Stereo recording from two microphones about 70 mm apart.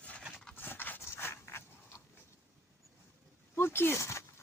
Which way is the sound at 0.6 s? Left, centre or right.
Left.